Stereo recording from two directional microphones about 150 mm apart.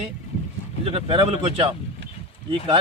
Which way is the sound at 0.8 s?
40° right (ahead or behind).